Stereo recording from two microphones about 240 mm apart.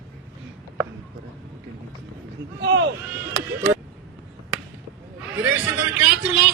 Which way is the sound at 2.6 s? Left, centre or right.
Right.